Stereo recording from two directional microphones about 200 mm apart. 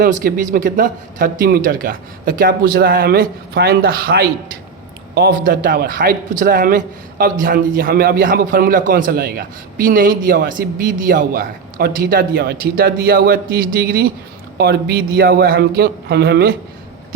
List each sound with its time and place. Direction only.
0.0 s a man's voice: 45° right (ahead or behind)